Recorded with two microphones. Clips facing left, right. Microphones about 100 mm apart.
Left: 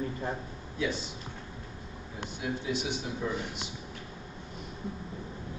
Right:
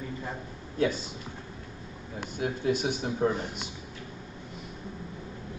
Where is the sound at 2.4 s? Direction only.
50° right (ahead or behind).